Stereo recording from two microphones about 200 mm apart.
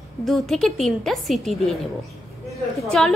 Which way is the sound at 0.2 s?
Centre (ahead or behind).